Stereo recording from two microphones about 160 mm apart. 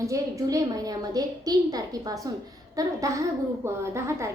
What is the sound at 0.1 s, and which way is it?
A woman's voice, 20° right (ahead or behind).